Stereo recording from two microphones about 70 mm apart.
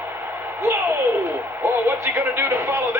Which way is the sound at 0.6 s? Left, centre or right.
Right.